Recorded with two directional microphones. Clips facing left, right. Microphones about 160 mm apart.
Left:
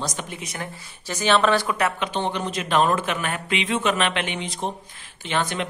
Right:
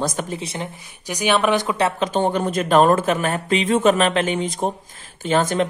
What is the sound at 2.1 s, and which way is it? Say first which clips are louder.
A man's voice: right 6 dB; 45° right (ahead or behind).